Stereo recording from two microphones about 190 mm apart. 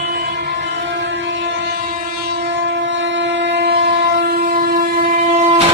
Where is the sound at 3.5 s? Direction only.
60° right (ahead or behind).